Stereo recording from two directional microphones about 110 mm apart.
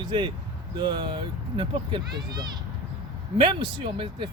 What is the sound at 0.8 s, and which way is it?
Speech, 45° right (ahead or behind).